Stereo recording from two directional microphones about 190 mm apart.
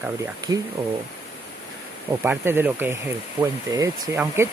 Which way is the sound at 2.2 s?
10° right (ahead or behind).